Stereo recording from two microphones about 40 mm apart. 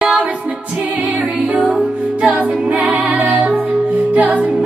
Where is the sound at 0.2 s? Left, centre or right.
Right.